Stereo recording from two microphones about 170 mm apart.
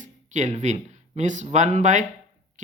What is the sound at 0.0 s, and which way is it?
Speech, 45° right (ahead or behind).